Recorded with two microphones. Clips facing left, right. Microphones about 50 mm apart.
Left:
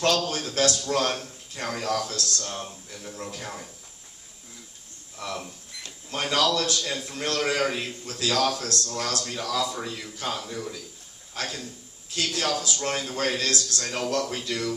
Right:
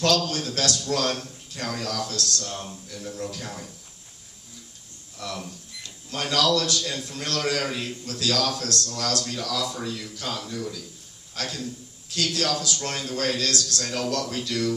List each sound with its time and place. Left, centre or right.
0.0 s a man's voice: left
5.1 s a man's voice: left